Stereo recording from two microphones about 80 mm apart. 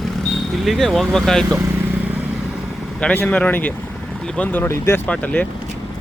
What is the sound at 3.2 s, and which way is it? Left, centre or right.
Speech, centre.